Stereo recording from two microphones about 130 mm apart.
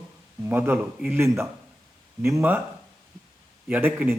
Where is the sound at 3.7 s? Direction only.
15° right (ahead or behind).